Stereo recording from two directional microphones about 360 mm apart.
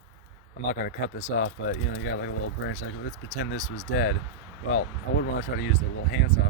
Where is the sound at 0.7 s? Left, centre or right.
Left.